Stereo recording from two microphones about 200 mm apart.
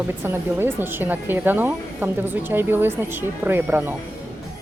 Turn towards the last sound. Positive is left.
turn(degrees=-10)  # may be behind; listen again after turning